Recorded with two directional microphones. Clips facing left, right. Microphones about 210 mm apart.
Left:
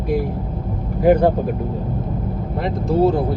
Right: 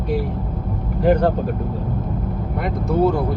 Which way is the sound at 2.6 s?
30° left (ahead or behind).